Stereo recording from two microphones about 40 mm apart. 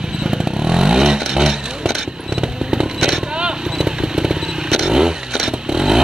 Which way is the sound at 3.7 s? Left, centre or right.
Centre.